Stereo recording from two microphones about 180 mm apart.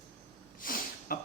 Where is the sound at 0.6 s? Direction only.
50° left (ahead or behind).